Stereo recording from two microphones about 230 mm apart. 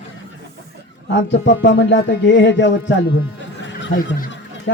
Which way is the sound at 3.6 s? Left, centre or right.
Left.